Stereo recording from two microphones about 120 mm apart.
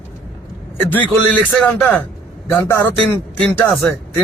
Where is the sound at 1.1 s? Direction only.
5° left (ahead or behind).